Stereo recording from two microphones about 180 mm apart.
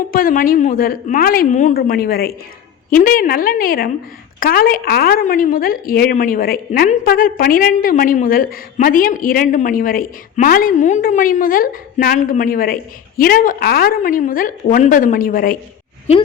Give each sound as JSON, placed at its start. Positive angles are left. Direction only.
{"t": 0.1, "sound": "a woman's voice", "side_deg": 50}